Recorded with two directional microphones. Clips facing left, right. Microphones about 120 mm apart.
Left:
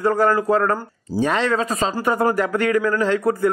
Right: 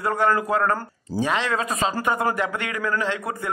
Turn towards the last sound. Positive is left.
turn(degrees=40)  # may be behind; listen again after turning